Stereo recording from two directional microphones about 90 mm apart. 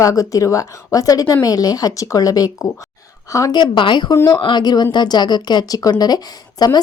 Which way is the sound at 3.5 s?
60° left (ahead or behind).